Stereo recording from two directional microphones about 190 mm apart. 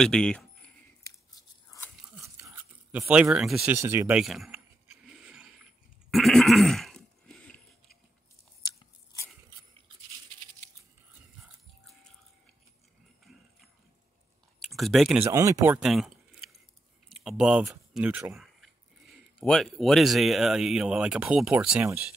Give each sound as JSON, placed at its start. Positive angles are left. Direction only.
{"t": 0.0, "sound": "speech", "side_deg": 5}
{"t": 2.0, "sound": "a sound", "side_deg": 0}
{"t": 2.2, "sound": "a sound", "side_deg": -15}
{"t": 3.7, "sound": "speech", "side_deg": -15}
{"t": 4.2, "sound": "speech", "side_deg": 0}
{"t": 5.2, "sound": "a sound", "side_deg": -5}
{"t": 8.6, "sound": "biting", "side_deg": 15}
{"t": 14.7, "sound": "speech", "side_deg": 0}
{"t": 15.2, "sound": "speech", "side_deg": -15}